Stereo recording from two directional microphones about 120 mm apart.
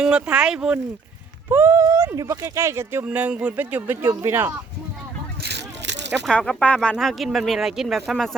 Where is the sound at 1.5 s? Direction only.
25° right (ahead or behind).